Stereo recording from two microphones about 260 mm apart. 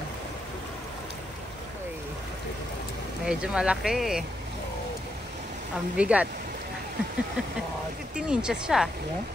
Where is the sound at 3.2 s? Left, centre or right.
Centre.